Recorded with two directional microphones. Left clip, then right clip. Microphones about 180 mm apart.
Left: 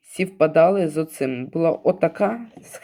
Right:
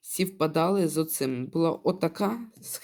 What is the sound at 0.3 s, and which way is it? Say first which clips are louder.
Speech: left 10 dB; 30° right (ahead or behind).